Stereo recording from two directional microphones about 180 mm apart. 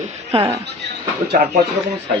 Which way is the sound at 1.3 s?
50° right (ahead or behind).